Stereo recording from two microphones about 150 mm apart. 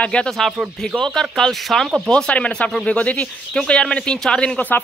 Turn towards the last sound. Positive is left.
turn(degrees=10)  # may be behind; listen again after turning